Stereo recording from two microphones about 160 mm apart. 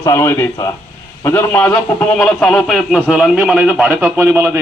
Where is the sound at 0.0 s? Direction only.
20° left (ahead or behind).